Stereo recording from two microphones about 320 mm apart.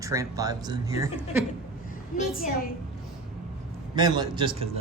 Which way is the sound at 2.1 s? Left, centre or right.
Left.